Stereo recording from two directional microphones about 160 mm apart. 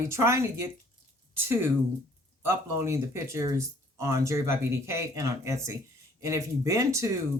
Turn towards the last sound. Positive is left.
turn(degrees=-20)  # may be behind; listen again after turning